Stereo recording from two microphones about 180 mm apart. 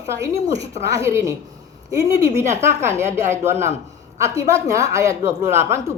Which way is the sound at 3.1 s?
15° right (ahead or behind).